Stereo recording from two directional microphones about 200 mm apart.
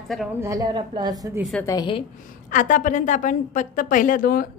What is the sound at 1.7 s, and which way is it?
Speech, 25° left (ahead or behind).